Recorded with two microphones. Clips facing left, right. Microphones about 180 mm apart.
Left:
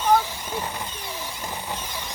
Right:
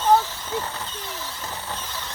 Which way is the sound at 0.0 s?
15° left (ahead or behind).